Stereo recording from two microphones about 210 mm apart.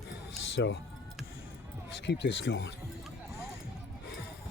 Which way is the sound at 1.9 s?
55° left (ahead or behind).